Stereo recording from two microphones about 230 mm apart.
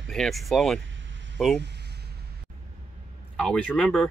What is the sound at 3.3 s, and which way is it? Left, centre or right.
Speech, centre.